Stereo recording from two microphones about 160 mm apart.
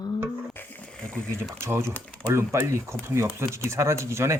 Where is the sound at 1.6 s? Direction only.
15° right (ahead or behind).